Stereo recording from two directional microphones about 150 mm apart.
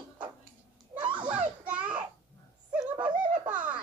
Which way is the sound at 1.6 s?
10° right (ahead or behind).